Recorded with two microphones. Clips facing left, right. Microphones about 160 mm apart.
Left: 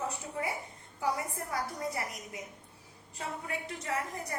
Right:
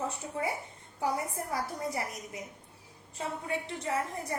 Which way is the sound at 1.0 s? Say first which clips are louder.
Right 1 dB; 25° right (ahead or behind).